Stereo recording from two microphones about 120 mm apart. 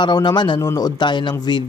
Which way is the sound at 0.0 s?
35° left (ahead or behind).